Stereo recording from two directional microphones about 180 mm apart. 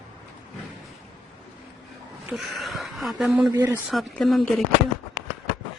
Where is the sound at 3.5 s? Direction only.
20° right (ahead or behind).